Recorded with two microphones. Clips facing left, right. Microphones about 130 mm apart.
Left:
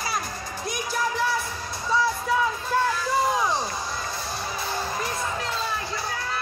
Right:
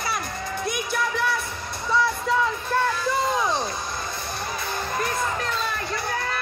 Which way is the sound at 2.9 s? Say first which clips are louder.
Even; 20° right (ahead or behind).